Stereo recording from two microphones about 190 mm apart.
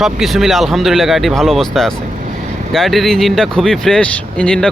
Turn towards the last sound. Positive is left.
turn(degrees=5)  # may be behind; listen again after turning